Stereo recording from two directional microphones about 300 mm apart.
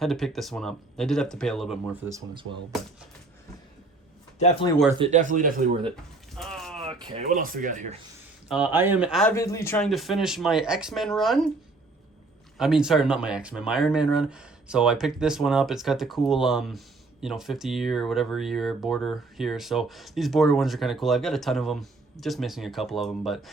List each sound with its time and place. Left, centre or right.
0.0 s speech: centre
4.4 s speech: left
4.9 s speech: right
6.3 s a sound: centre
6.8 s speech: centre
8.4 s speech: centre
12.5 s speech: centre